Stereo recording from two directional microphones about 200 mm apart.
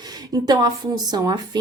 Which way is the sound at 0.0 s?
20° right (ahead or behind).